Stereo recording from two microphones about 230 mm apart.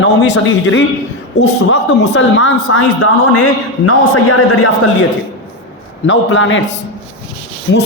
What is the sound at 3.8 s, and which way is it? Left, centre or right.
Speech, left.